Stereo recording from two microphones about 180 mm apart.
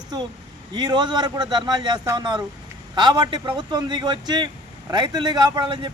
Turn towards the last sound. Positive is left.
turn(degrees=-25)  # may be behind; listen again after turning